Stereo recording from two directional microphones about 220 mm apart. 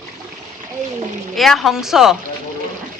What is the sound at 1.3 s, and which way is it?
Speech, centre (ahead or behind).